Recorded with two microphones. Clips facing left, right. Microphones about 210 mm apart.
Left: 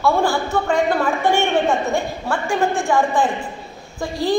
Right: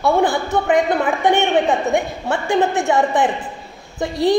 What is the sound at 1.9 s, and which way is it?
A woman's voice, 20° right (ahead or behind).